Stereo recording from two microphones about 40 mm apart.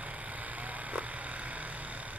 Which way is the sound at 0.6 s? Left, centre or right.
Right.